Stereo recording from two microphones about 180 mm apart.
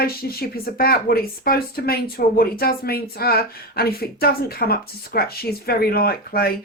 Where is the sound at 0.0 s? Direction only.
55° left (ahead or behind).